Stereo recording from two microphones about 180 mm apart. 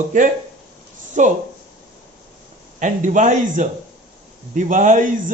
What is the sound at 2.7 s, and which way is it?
A man's voice, 45° right (ahead or behind).